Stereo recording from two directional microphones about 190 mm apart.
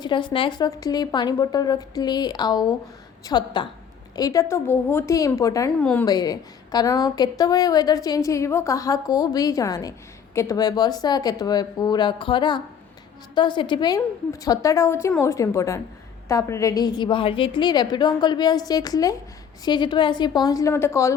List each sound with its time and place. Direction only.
0.0 s a woman's voice: 25° left (ahead or behind); by 6.1 s 5° left (ahead or behind)
6.1 s a woman's voice: 20° left (ahead or behind)